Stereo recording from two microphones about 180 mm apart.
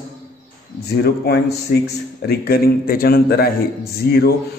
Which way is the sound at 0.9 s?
65° left (ahead or behind).